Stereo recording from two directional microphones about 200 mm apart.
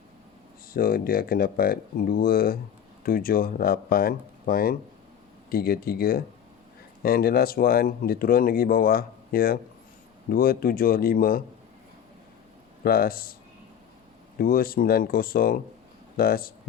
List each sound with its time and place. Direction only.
0.7 s speech: 45° left (ahead or behind)
12.8 s speech: 50° left (ahead or behind)
14.3 s speech: 45° left (ahead or behind)